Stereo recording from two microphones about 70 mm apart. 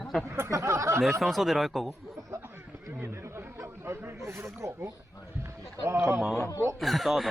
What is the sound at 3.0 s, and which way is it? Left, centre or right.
Speech, right.